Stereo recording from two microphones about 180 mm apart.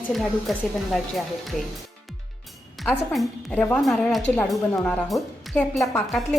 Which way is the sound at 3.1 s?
5° left (ahead or behind).